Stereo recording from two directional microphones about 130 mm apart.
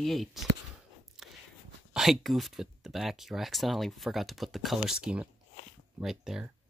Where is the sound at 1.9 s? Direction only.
Centre (ahead or behind).